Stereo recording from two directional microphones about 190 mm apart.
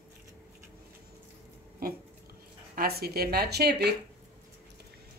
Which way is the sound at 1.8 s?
50° right (ahead or behind).